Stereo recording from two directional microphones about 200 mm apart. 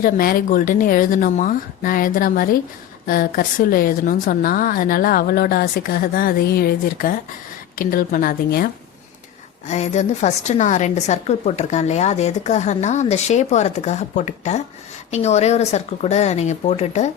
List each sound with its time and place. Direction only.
0.0 s speech: 45° left (ahead or behind)
9.6 s a woman's voice: 35° left (ahead or behind)